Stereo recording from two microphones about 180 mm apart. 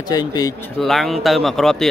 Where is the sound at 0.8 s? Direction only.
Centre (ahead or behind).